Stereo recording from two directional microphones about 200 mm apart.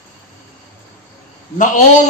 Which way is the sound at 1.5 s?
40° left (ahead or behind).